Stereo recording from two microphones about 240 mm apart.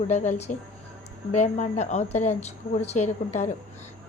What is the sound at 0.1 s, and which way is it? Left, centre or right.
A woman's voice, left.